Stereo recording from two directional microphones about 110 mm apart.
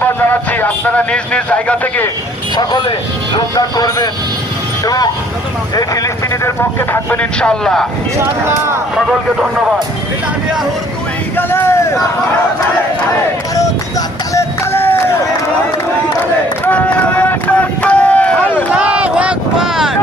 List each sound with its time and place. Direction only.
0.0 s a man's voice: 15° left (ahead or behind)
2.6 s speech: 45° left (ahead or behind)
5.7 s speech: 35° left (ahead or behind)
6.6 s speech: 20° left (ahead or behind); by 7.9 s 5° left (ahead or behind)
8.2 s speech: 25° right (ahead or behind)
9.0 s speech: 5° right (ahead or behind)
11.3 s speech: 20° left (ahead or behind)
14.3 s run: 25° left (ahead or behind)
16.6 s run: 15° left (ahead or behind)
18.8 s a sound: 10° right (ahead or behind)